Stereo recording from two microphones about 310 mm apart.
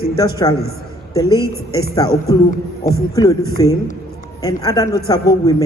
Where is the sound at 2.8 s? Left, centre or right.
Centre.